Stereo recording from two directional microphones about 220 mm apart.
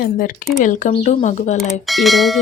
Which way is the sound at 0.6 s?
35° left (ahead or behind).